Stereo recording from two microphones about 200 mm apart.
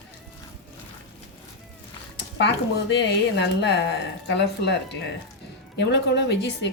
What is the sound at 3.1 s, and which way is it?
Speech, 60° left (ahead or behind).